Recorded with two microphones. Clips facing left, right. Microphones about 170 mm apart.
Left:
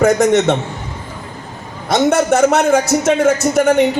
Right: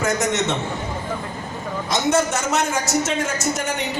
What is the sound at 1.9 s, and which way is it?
A man's voice, 60° left (ahead or behind).